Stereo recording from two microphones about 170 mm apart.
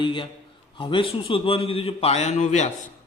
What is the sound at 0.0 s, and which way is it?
A man's voice, 30° left (ahead or behind).